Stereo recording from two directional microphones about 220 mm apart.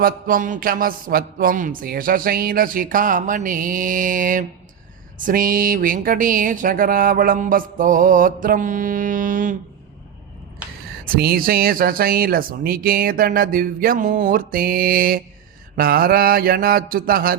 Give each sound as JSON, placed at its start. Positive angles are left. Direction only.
{"t": 0.0, "sound": "a man's voice", "side_deg": -40}
{"t": 11.0, "sound": "a man's voice", "side_deg": -45}
{"t": 15.7, "sound": "a sound", "side_deg": -45}